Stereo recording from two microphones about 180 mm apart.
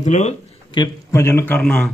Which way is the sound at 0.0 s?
40° left (ahead or behind).